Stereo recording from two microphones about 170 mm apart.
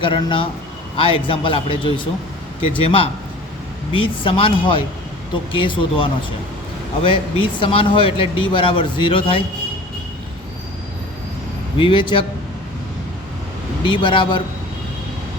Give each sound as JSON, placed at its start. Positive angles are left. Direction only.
{"t": 0.0, "sound": "speech", "side_deg": 30}
{"t": 11.8, "sound": "speech", "side_deg": 30}
{"t": 13.8, "sound": "speech", "side_deg": 30}